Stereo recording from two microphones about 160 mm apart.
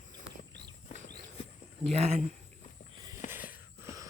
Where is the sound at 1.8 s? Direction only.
40° right (ahead or behind).